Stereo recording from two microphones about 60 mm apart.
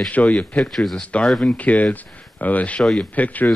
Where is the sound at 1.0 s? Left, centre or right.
Left.